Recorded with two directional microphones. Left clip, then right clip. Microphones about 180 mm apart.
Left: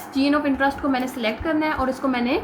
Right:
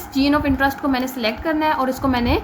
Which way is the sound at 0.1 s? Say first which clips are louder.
Right 2 dB; 35° right (ahead or behind).